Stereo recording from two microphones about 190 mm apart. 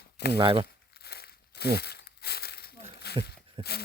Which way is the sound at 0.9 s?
55° left (ahead or behind).